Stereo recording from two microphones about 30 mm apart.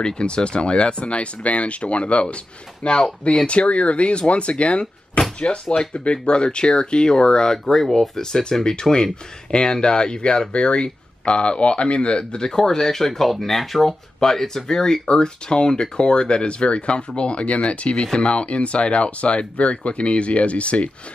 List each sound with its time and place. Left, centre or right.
0.0 s speech: left
7.7 s speech: centre
8.2 s speech: left; by 13.9 s centre
14.2 s speech: centre; by 20.9 s left